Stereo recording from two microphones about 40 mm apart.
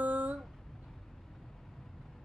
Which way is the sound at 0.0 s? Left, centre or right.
Right.